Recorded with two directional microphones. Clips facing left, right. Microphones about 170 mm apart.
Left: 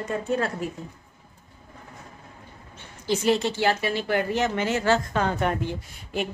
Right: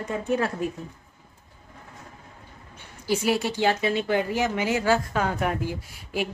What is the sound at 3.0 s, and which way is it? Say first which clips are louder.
A woman's voice: left 2 dB; 10° right (ahead or behind).